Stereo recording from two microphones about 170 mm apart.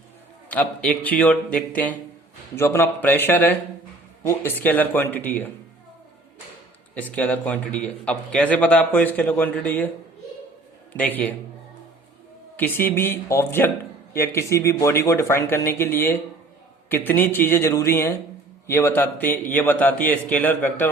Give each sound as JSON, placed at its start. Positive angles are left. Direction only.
{"t": 0.5, "sound": "speech", "side_deg": 10}
{"t": 6.9, "sound": "speech", "side_deg": 10}
{"t": 10.9, "sound": "speech", "side_deg": 10}
{"t": 12.5, "sound": "speech", "side_deg": 10}